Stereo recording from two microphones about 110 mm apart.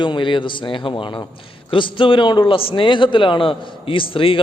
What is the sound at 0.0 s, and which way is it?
A man's voice, 45° left (ahead or behind).